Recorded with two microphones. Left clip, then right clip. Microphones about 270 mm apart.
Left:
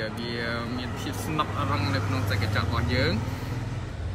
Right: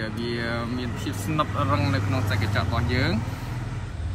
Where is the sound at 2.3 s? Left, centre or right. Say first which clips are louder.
Right 1 dB; right.